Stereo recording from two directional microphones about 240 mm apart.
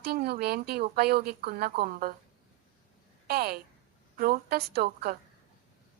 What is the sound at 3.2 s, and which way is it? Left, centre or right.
A woman's voice, right.